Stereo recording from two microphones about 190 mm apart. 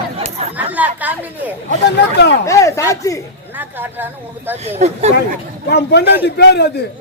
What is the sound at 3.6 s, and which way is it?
Speech, 10° right (ahead or behind).